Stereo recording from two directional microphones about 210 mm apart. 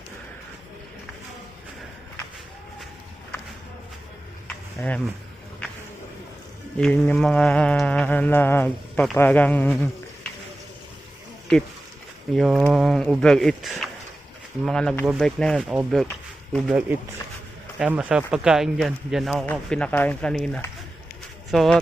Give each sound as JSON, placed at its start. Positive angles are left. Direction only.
{"t": 4.4, "sound": "a sound", "side_deg": 5}
{"t": 6.7, "sound": "mantra", "side_deg": 5}
{"t": 12.3, "sound": "speech", "side_deg": 0}